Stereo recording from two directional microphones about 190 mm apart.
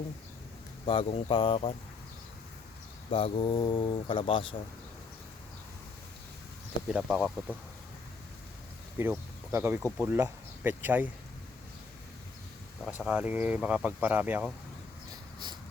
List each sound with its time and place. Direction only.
0.9 s speech: 30° left (ahead or behind)
3.1 s speech: 30° left (ahead or behind)
6.9 s speech: 5° right (ahead or behind)
9.0 s speech: 10° right (ahead or behind)
12.9 s speech: 5° right (ahead or behind)